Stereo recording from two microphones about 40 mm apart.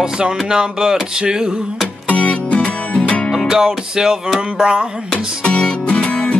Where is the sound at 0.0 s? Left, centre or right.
Centre.